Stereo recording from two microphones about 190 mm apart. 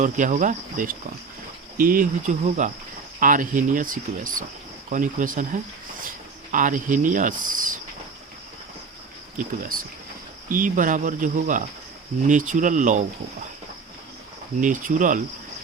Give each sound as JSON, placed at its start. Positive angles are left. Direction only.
{"t": 0.0, "sound": "speech", "side_deg": -40}
{"t": 1.8, "sound": "cricket", "side_deg": -45}
{"t": 3.2, "sound": "speech", "side_deg": -45}
{"t": 9.7, "sound": "speech", "side_deg": -50}
{"t": 12.3, "sound": "cricket", "side_deg": -40}
{"t": 14.6, "sound": "speech", "side_deg": -45}